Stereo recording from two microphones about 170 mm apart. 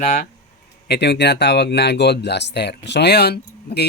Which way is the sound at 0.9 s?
80° left.